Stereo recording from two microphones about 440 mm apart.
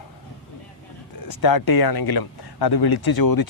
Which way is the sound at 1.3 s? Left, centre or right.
Left.